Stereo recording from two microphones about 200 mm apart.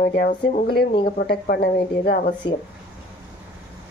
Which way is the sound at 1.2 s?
50° left (ahead or behind).